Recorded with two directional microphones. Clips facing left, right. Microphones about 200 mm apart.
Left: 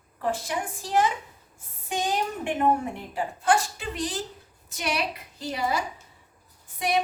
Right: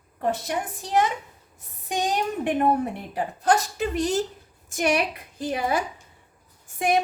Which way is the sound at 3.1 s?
40° right (ahead or behind).